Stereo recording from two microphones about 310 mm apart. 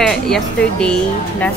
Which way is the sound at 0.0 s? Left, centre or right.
Centre.